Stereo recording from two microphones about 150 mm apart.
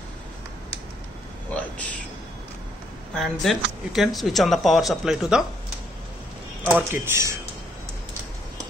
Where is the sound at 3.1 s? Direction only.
Centre (ahead or behind).